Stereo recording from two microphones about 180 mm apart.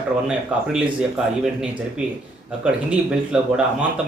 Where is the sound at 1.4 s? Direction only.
5° right (ahead or behind).